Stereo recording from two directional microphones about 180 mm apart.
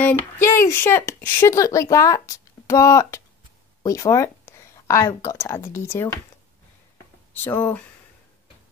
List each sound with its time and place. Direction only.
0.0 s speech: 15° left (ahead or behind)
7.4 s speech: 10° left (ahead or behind)